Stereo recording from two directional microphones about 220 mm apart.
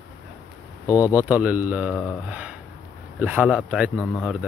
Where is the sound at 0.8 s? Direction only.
15° left (ahead or behind).